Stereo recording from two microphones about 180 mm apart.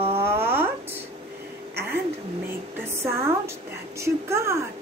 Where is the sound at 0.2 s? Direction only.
15° right (ahead or behind).